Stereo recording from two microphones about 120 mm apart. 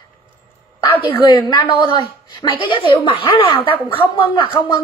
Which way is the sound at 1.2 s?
40° left (ahead or behind).